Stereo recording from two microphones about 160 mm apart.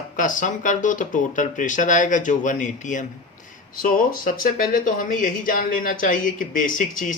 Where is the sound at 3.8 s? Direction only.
60° left (ahead or behind).